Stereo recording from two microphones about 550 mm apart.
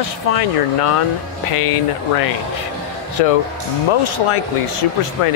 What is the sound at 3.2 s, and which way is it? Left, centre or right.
Speech, left.